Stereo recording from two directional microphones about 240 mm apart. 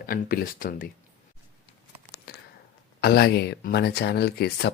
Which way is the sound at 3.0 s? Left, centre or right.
Left.